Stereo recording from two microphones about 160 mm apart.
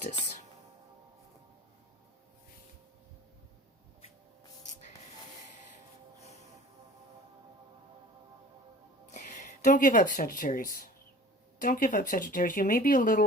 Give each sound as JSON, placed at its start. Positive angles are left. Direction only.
{"t": 9.1, "sound": "speech", "side_deg": 50}